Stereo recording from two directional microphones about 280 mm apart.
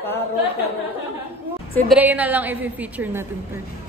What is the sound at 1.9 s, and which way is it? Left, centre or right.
A woman's voice, centre.